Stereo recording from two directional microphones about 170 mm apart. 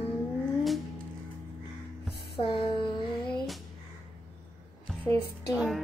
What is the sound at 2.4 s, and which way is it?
Music, 30° left (ahead or behind).